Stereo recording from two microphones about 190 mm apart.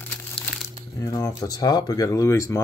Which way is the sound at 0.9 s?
20° left (ahead or behind).